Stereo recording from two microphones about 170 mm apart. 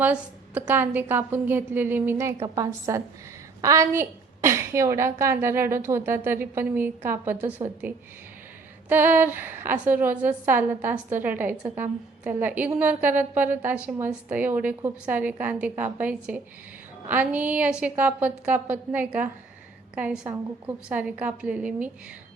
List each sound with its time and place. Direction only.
0.0 s a woman's voice: 5° right (ahead or behind)